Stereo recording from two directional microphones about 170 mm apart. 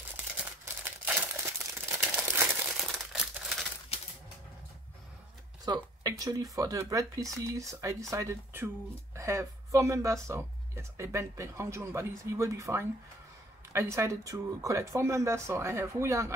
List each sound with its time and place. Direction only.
0.4 s crumpling: 10° right (ahead or behind)
5.7 s speech: 20° right (ahead or behind)